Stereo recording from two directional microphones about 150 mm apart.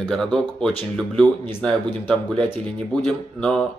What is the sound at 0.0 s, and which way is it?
Speech, 5° left (ahead or behind).